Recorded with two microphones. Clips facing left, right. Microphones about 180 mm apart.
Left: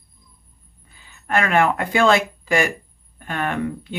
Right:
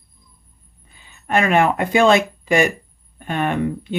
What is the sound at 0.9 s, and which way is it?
Speech, 20° right (ahead or behind).